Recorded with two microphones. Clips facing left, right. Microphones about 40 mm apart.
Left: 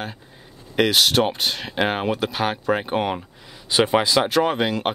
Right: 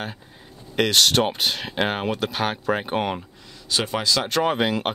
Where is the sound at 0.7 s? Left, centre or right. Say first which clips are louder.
Left 1 dB; centre.